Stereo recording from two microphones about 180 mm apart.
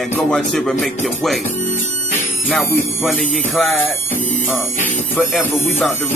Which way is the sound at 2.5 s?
Centre (ahead or behind).